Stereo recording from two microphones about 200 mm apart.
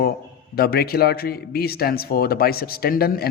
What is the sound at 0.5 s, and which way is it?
Speech, 50° left (ahead or behind).